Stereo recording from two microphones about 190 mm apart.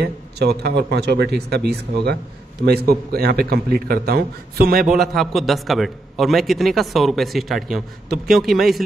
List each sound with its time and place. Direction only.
0.0 s a man's voice: 60° right (ahead or behind)
4.8 s a man's voice: centre (ahead or behind)